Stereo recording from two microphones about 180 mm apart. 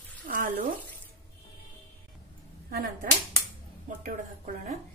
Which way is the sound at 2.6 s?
55° right (ahead or behind).